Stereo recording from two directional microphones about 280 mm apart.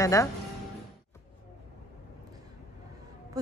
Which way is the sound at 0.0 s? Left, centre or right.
Centre.